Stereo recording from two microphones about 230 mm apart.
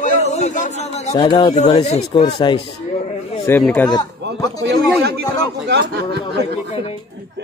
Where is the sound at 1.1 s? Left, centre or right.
Centre.